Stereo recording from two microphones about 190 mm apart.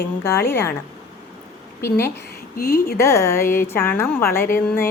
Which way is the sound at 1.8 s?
15° left (ahead or behind).